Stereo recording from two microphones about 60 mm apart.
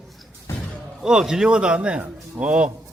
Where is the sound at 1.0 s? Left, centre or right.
Centre.